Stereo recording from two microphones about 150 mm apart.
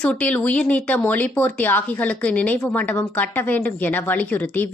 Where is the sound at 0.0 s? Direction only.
5° left (ahead or behind).